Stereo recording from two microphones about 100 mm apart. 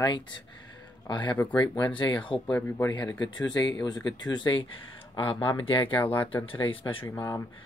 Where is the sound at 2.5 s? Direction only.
15° left (ahead or behind).